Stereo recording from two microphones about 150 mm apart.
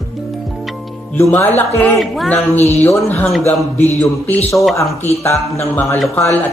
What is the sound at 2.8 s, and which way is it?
Speech, 15° left (ahead or behind).